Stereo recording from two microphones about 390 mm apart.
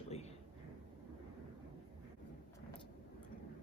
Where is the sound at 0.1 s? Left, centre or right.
Centre.